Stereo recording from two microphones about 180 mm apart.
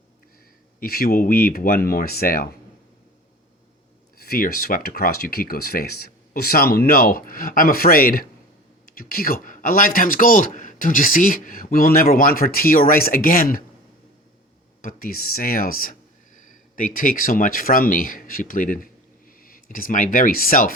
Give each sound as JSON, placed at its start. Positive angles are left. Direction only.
{"t": 0.8, "sound": "speech", "side_deg": 55}
{"t": 4.3, "sound": "a man's voice", "side_deg": 55}
{"t": 14.8, "sound": "a man's voice", "side_deg": 50}